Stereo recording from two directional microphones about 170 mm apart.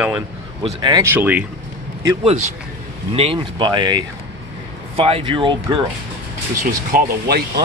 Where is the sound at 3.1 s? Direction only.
30° right (ahead or behind).